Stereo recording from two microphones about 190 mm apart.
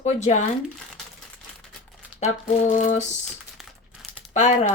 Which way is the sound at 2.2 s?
35° left (ahead or behind).